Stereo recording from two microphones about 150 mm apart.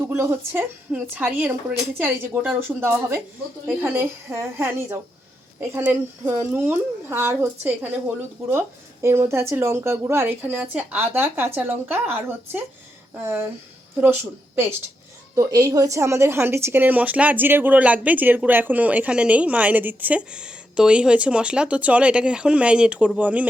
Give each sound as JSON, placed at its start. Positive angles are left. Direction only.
{"t": 0.0, "sound": "speech", "side_deg": -15}